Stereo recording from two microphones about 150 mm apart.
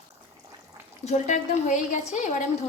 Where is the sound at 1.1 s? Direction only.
50° left (ahead or behind).